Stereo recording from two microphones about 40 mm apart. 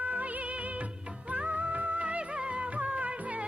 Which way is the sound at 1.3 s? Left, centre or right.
Right.